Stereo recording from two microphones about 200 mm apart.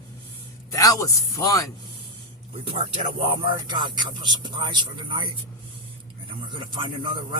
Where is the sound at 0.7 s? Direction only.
15° left (ahead or behind).